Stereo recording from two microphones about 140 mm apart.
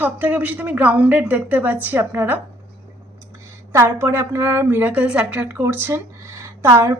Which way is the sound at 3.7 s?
20° right (ahead or behind).